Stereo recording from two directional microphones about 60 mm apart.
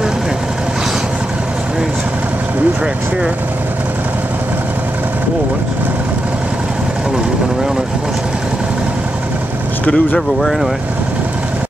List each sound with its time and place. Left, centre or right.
9.8 s speech: centre